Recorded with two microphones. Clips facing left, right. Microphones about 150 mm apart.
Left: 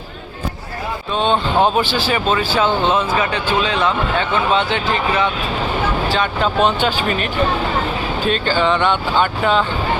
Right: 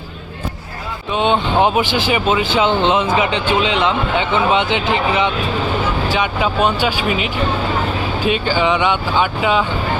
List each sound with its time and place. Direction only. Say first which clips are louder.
1.1 s speech: right 1 dB; 15° right (ahead or behind)